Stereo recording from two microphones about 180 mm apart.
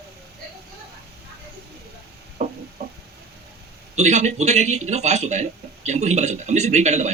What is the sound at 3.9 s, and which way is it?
Speech, 40° right (ahead or behind).